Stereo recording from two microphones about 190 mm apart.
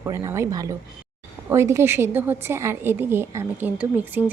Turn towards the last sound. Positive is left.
turn(degrees=-10)  # may be behind; listen again after turning